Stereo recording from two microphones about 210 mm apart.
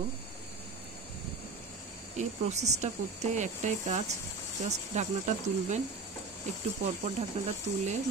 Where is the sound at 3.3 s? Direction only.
35° right (ahead or behind).